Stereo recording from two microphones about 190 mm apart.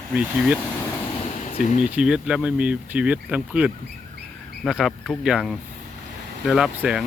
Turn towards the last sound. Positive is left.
turn(degrees=-5)  # may be behind; listen again after turning